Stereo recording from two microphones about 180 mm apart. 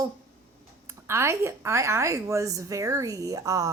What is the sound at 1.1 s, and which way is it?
A woman's voice, 15° right (ahead or behind).